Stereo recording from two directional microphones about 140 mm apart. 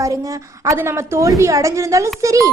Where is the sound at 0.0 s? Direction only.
25° right (ahead or behind).